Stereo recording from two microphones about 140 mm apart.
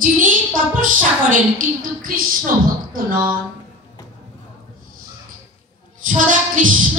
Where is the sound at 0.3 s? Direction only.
75° right (ahead or behind).